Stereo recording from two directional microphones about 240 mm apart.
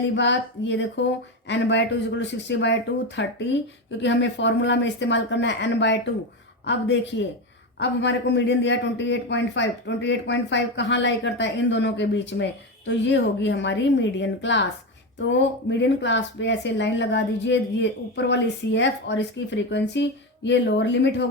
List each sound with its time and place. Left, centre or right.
0.0 s a man's voice: left